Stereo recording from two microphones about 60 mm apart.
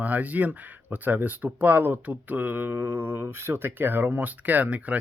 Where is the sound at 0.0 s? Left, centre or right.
Right.